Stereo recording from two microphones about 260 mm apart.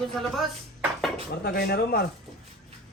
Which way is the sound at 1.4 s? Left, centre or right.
Left.